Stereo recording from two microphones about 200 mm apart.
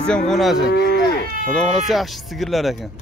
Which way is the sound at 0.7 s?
55° left (ahead or behind).